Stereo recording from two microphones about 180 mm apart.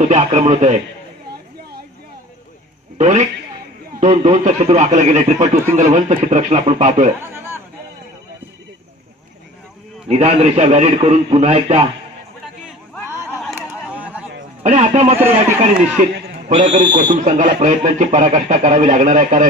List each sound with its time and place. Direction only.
0.0 s speech: 35° right (ahead or behind)
3.0 s a man's voice: 40° right (ahead or behind)
7.2 s chatter: 10° right (ahead or behind)
10.0 s speech: 35° right (ahead or behind)
13.6 s a sound: 10° right (ahead or behind)
14.6 s a man's voice: 35° right (ahead or behind)